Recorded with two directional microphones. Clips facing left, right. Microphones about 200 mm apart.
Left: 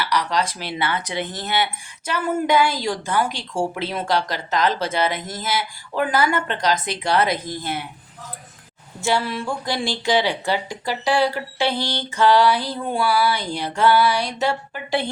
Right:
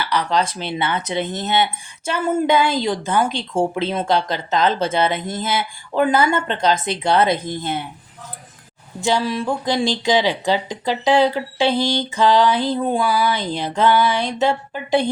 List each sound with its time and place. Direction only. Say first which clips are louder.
0.0 s speech: right 2 dB; 25° right (ahead or behind)
9.0 s speech: right 3 dB; 15° right (ahead or behind)